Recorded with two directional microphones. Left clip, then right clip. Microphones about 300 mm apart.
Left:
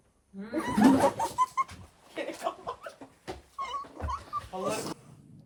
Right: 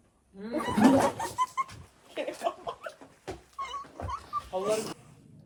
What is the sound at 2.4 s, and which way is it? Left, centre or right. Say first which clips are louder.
Chuckle: right 2 dB; right.